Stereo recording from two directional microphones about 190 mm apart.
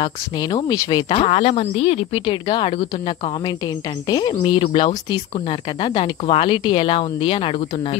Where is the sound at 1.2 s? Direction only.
35° left (ahead or behind).